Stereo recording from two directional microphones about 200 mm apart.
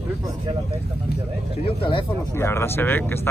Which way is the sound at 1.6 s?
25° left (ahead or behind).